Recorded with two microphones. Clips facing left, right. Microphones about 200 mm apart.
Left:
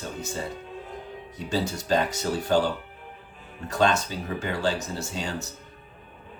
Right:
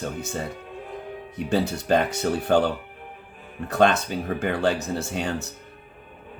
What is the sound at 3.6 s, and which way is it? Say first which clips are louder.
Speech: right 3 dB; 55° right (ahead or behind).